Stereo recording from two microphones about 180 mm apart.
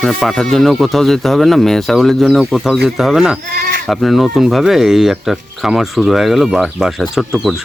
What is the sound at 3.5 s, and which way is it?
Speech, 45° right (ahead or behind).